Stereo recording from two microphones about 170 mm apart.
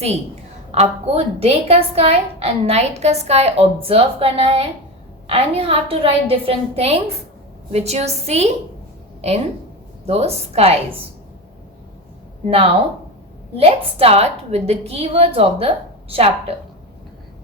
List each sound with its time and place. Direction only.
0.7 s a woman's voice: 40° right (ahead or behind)
10.1 s a woman's voice: 35° right (ahead or behind)
12.5 s a woman's voice: 35° right (ahead or behind)